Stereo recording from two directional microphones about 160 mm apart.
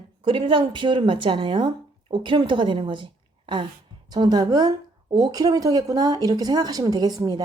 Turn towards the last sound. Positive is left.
turn(degrees=-25)  # may be behind; listen again after turning